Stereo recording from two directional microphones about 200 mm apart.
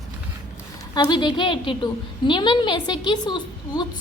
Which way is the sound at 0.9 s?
20° left (ahead or behind).